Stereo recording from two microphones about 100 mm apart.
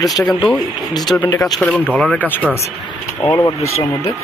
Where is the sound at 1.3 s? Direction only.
35° left (ahead or behind).